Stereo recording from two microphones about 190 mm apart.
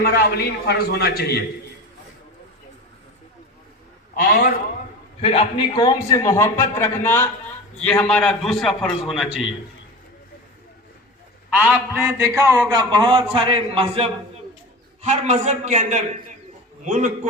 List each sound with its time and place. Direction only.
0.0 s a man's voice: 55° left (ahead or behind)
4.1 s a man's voice: 55° left (ahead or behind)
5.2 s a man's voice: 30° left (ahead or behind); by 9.5 s centre (ahead or behind)
11.5 s a man's voice: 10° right (ahead or behind); by 17.1 s 40° right (ahead or behind)